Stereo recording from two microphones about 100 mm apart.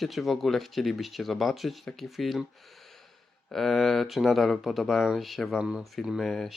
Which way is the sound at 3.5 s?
Centre (ahead or behind).